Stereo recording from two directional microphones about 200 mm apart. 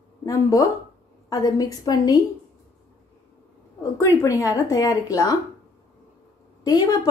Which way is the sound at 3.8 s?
15° left (ahead or behind).